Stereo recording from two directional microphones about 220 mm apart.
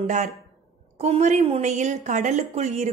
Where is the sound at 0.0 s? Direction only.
35° right (ahead or behind).